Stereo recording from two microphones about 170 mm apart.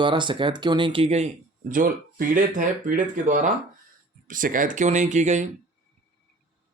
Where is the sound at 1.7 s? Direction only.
55° right (ahead or behind).